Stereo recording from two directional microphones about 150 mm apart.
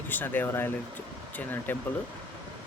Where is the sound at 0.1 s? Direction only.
15° left (ahead or behind).